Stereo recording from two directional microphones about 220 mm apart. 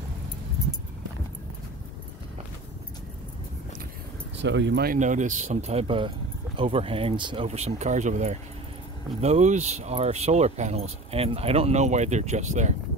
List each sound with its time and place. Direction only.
4.4 s speech: 55° right (ahead or behind)
4.9 s speech: 35° right (ahead or behind)